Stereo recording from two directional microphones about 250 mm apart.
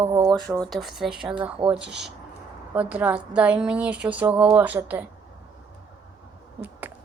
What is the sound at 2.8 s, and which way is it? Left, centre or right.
A woman's voice, centre.